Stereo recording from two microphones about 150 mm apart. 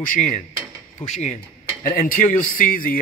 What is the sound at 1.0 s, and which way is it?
Speech, 50° left (ahead or behind).